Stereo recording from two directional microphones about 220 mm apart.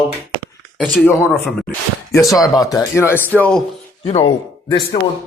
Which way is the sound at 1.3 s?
Centre (ahead or behind).